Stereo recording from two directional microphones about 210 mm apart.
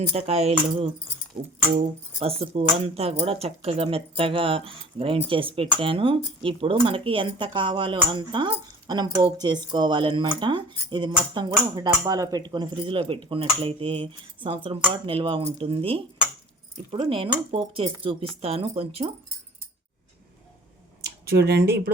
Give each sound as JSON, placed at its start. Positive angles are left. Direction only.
{"t": 0.1, "sound": "speech", "side_deg": -30}
{"t": 21.0, "sound": "speech", "side_deg": -50}